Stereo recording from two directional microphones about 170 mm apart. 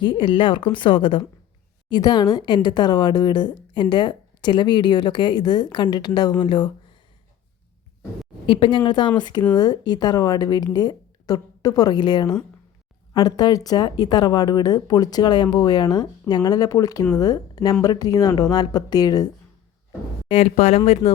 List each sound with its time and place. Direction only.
0.0 s a woman's voice: 30° left (ahead or behind)
8.4 s a woman's voice: 30° left (ahead or behind)
20.2 s speech: 35° left (ahead or behind)